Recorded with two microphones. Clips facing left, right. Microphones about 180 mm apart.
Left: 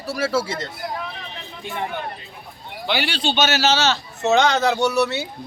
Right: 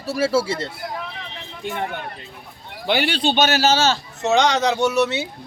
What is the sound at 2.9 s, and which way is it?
Speech, 50° right (ahead or behind).